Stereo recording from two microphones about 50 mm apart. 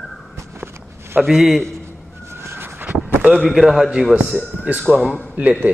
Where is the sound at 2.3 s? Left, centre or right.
Right.